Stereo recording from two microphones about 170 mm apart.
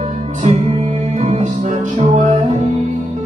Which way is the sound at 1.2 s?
45° right (ahead or behind).